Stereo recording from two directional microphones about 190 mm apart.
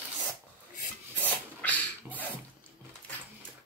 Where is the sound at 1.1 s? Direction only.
10° left (ahead or behind).